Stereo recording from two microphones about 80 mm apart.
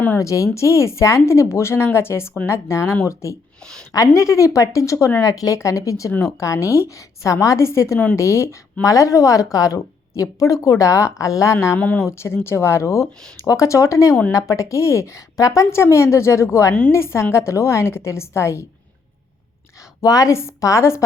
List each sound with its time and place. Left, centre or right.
0.2 s a woman's voice: left
20.0 s a woman's voice: left